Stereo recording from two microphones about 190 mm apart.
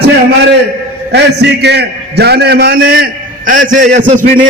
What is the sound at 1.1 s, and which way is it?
A man's voice, 60° right (ahead or behind).